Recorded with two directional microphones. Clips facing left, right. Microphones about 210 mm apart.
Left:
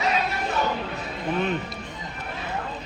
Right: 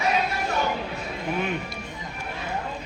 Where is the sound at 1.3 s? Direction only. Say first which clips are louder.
Left 3 dB; 10° right (ahead or behind).